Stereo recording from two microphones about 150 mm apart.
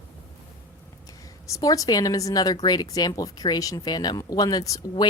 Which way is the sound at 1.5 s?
25° left (ahead or behind).